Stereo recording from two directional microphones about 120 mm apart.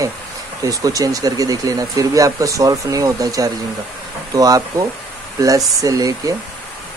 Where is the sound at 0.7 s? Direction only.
30° right (ahead or behind).